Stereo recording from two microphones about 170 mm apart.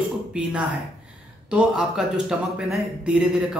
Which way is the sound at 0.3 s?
5° right (ahead or behind).